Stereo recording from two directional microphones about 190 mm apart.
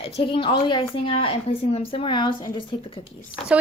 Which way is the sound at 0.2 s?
30° left (ahead or behind).